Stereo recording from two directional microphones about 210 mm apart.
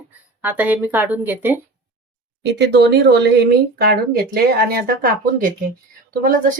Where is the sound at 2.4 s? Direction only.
55° right (ahead or behind).